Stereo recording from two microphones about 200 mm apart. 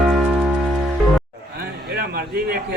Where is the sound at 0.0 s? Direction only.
Centre (ahead or behind).